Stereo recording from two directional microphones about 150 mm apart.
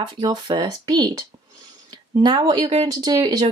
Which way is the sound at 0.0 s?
25° right (ahead or behind).